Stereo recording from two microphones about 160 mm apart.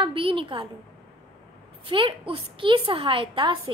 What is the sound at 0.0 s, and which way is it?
Speech, 35° right (ahead or behind).